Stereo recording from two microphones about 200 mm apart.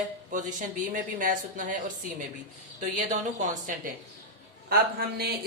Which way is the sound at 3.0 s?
40° right (ahead or behind).